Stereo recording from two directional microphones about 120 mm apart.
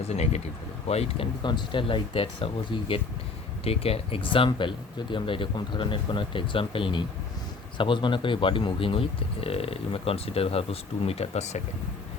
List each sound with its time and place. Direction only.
0.0 s speech: 65° left (ahead or behind)
1.4 s speech: 40° left (ahead or behind)
3.6 s speech: 55° left (ahead or behind)